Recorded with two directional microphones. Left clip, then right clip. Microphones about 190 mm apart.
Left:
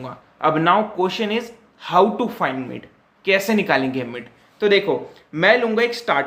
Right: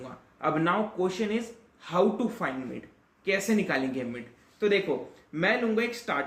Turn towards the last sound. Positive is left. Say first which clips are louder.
# left 10 dB
turn(degrees=20)  # may be behind; listen again after turning